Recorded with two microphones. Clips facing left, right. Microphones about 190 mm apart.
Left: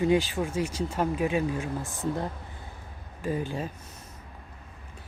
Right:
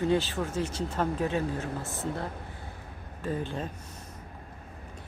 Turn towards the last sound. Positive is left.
turn(degrees=10)  # may be behind; listen again after turning